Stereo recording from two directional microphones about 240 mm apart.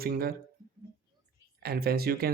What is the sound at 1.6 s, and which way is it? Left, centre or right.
Speech, right.